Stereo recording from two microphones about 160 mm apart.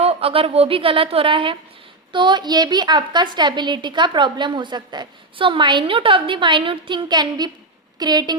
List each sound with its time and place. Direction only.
0.0 s a woman's voice: 40° right (ahead or behind)